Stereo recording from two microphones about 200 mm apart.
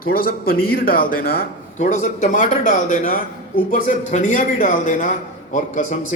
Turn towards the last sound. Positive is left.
turn(degrees=40)  # may be behind; listen again after turning